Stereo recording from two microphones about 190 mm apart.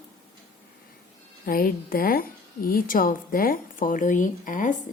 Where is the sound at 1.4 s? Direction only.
50° left (ahead or behind).